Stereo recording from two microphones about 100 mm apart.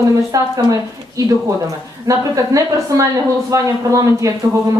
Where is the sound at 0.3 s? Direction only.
35° right (ahead or behind).